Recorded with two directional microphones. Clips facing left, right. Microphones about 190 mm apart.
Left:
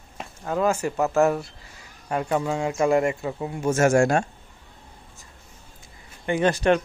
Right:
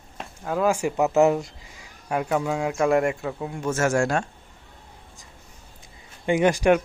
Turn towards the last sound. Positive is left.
turn(degrees=-10)  # may be behind; listen again after turning